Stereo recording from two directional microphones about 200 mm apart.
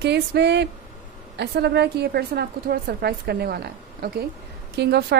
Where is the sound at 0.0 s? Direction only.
55° right (ahead or behind).